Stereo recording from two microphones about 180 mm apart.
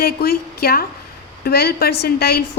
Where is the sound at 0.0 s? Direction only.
60° left (ahead or behind).